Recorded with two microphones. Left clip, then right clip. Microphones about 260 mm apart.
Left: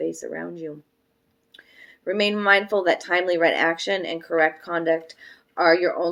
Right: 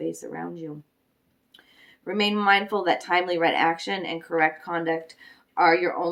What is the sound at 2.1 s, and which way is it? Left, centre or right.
Speech, centre.